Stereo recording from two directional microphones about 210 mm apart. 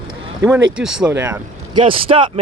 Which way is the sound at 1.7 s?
25° right (ahead or behind).